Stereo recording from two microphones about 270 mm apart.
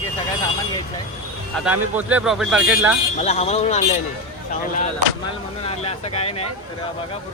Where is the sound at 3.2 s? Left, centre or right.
Left.